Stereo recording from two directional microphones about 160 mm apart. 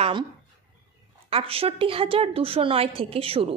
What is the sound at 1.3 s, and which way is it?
A woman's voice, 35° right (ahead or behind).